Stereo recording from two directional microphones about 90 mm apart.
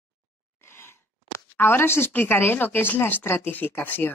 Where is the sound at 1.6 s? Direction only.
25° left (ahead or behind).